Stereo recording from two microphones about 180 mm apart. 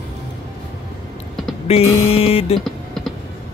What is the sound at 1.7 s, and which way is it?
Speech, 35° left (ahead or behind).